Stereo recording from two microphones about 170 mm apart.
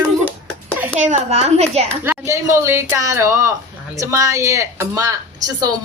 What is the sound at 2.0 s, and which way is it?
A woman's voice, 15° right (ahead or behind).